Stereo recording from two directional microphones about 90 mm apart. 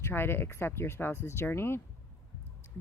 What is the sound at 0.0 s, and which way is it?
Speech, 25° left (ahead or behind).